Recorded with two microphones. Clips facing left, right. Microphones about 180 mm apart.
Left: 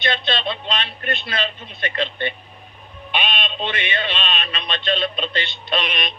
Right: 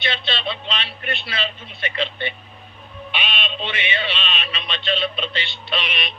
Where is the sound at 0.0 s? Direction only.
50° left (ahead or behind).